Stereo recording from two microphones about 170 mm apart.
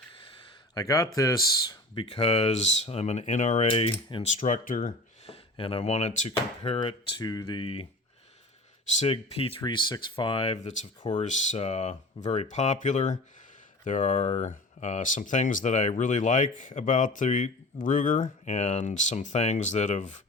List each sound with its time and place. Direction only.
0.7 s speech: 20° left (ahead or behind)
2.0 s speech: 35° left (ahead or behind)
3.7 s speech: 30° left (ahead or behind); by 5.3 s 50° left (ahead or behind)
5.3 s speech: 30° left (ahead or behind)
6.6 s speech: 30° left (ahead or behind)
9.0 s speech: 35° left (ahead or behind)